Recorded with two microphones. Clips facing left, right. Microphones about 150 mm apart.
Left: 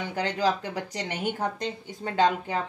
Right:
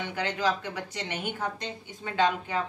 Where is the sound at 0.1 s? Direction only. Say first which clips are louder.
Left 3 dB; 35° left (ahead or behind).